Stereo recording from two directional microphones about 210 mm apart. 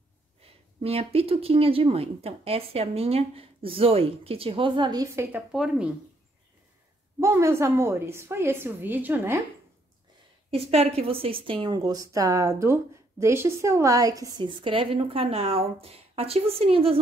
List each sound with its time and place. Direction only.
0.4 s a woman's voice: 30° right (ahead or behind); by 5.9 s 5° right (ahead or behind)
7.2 s a woman's voice: 15° right (ahead or behind)
10.5 s a woman's voice: 30° right (ahead or behind)